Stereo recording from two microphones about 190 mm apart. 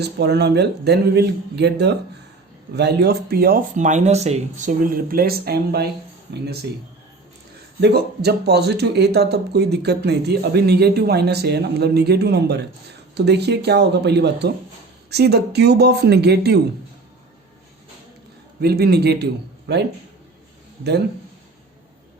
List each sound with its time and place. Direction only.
0.0 s speech: 60° right (ahead or behind)
7.8 s speech: 60° right (ahead or behind)
18.6 s speech: 55° right (ahead or behind)